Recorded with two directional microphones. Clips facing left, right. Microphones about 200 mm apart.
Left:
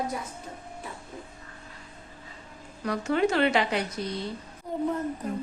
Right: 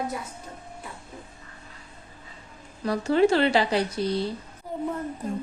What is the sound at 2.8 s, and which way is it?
Speech, 30° right (ahead or behind).